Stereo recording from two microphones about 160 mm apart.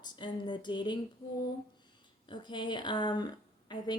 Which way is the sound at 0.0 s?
30° left (ahead or behind).